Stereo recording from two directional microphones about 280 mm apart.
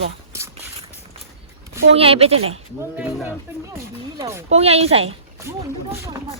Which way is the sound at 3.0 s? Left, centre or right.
Centre.